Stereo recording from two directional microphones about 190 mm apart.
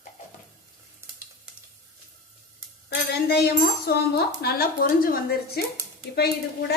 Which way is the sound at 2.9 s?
60° left (ahead or behind).